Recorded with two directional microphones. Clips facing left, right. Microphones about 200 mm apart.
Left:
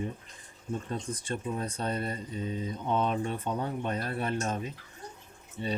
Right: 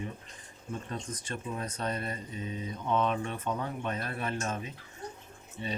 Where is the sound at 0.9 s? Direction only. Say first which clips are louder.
Left 4 dB; 30° left (ahead or behind).